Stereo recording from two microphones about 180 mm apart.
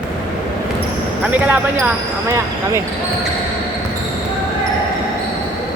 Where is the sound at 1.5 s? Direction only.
10° right (ahead or behind).